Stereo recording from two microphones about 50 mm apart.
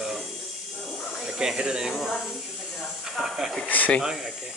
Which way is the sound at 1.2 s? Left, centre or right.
Centre.